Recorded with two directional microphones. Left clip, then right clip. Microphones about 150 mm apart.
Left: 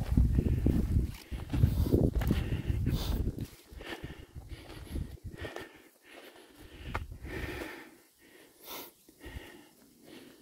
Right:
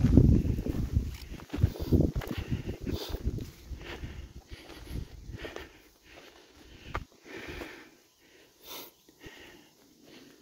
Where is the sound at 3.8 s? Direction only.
25° left (ahead or behind).